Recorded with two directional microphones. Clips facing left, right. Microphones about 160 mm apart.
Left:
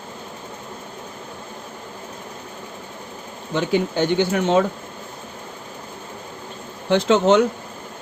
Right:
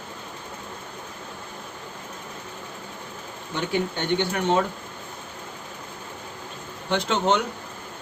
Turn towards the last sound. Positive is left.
turn(degrees=90)